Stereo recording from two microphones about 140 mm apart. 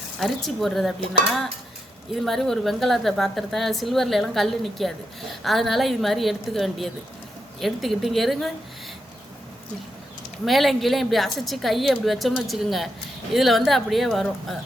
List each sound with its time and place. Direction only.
0.2 s a woman's voice: centre (ahead or behind)
10.4 s a woman's voice: centre (ahead or behind)